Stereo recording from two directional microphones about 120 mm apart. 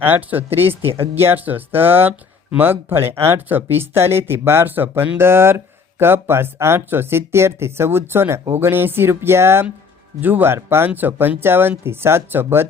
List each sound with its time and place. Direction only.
0.0 s speech: 15° right (ahead or behind)